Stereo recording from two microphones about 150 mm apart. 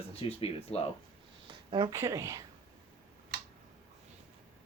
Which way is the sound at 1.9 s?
20° right (ahead or behind).